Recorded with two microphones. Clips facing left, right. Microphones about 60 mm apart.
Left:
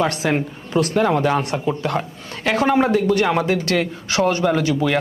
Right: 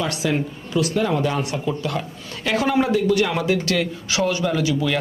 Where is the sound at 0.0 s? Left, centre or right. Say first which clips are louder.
Left 3 dB; left.